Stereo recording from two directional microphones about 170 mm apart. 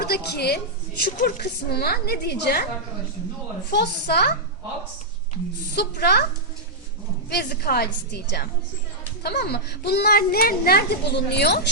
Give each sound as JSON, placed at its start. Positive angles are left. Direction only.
{"t": 0.0, "sound": "a woman's voice", "side_deg": 65}
{"t": 3.7, "sound": "speech", "side_deg": 70}
{"t": 5.7, "sound": "speech", "side_deg": 70}
{"t": 7.3, "sound": "speech", "side_deg": 70}